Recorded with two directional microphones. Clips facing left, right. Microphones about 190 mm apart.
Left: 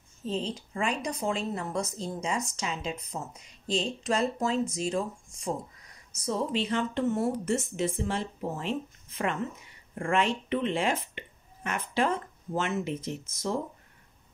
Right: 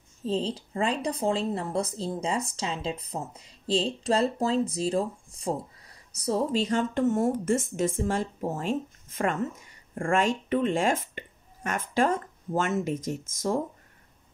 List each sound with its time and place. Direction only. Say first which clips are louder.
0.2 s a woman's voice: right 4 dB; 35° right (ahead or behind)